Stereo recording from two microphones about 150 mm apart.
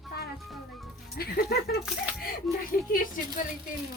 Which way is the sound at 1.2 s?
85° left.